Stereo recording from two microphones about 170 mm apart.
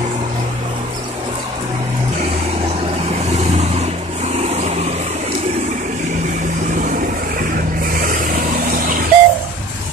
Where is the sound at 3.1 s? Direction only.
40° right (ahead or behind).